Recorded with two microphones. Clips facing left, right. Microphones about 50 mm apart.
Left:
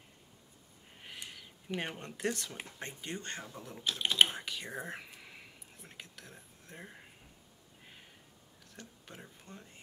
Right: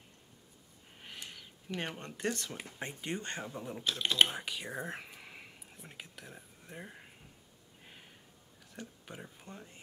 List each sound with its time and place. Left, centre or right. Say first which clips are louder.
0.9 s a sound: even; centre
1.7 s speech: left 1 dB; centre
2.8 s speech: right 4 dB; right
4.0 s speech: left 1 dB; centre
4.3 s speech: right 1 dB; centre
7.8 s a sound: right 1 dB; centre
8.7 s speech: right 4 dB; centre